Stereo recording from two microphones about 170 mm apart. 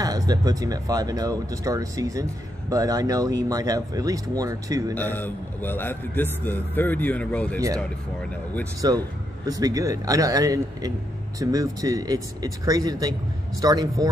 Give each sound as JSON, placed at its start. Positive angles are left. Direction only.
{"t": 0.0, "sound": "speech", "side_deg": -20}
{"t": 4.9, "sound": "a man's voice", "side_deg": 10}
{"t": 8.8, "sound": "speech", "side_deg": -25}